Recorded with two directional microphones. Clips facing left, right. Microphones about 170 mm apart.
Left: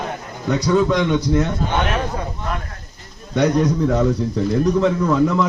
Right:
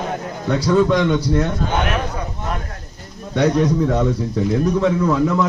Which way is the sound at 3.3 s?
Centre (ahead or behind).